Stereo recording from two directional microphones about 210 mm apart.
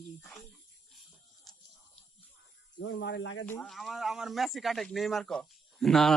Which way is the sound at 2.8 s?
55° left (ahead or behind).